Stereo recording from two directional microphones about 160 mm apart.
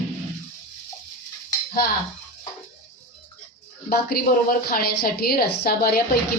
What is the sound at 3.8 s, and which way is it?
A woman's voice, 70° left (ahead or behind).